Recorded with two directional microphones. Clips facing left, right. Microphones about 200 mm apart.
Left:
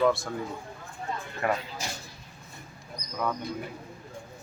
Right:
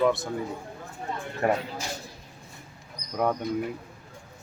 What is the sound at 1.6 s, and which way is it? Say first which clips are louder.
Speech: right 5 dB; 55° right (ahead or behind).